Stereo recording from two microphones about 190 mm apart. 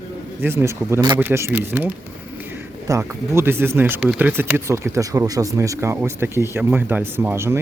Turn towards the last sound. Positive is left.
turn(degrees=-15)  # may be behind; listen again after turning